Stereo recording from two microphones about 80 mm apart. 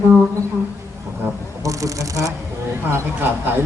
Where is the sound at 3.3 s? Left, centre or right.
Right.